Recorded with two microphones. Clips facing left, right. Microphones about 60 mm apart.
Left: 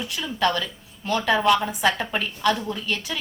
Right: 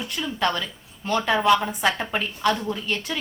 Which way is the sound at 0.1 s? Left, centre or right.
Centre.